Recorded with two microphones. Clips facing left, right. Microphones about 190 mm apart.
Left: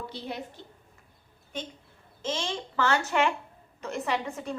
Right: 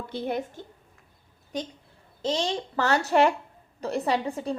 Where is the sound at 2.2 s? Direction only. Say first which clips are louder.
Right 5 dB; 35° right (ahead or behind).